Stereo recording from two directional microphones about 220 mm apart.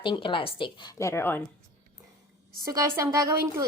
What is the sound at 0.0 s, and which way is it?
A woman's voice, 20° left (ahead or behind).